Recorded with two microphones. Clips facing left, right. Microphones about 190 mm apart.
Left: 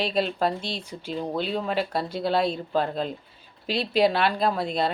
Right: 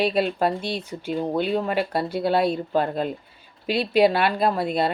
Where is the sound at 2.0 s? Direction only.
55° right (ahead or behind).